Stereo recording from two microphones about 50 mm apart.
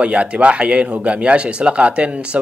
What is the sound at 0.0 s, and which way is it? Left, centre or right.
Speech, right.